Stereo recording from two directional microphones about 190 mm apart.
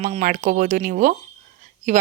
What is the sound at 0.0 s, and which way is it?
Speech, 40° right (ahead or behind).